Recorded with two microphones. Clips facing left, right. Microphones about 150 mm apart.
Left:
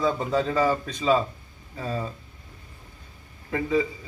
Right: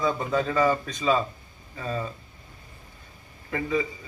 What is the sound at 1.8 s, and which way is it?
Speech, 5° left (ahead or behind).